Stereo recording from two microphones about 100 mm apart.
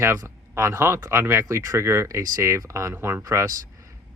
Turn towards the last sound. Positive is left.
turn(degrees=-35)  # may be behind; listen again after turning